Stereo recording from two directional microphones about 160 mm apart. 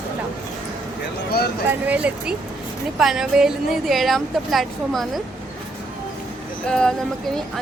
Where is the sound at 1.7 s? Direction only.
10° right (ahead or behind).